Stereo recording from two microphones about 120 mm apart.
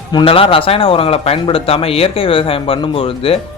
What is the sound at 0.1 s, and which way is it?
A man's voice, 45° left (ahead or behind).